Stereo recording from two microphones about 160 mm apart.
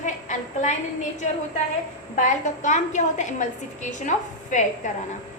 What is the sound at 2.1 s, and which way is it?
A woman's voice, 50° left (ahead or behind).